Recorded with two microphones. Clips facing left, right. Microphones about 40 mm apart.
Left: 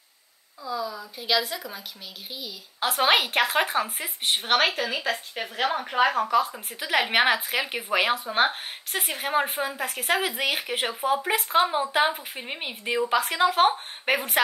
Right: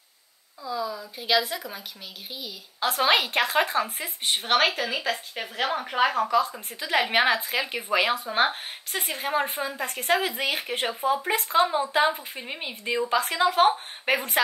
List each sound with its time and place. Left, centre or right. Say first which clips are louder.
0.7 s a woman's voice: even; centre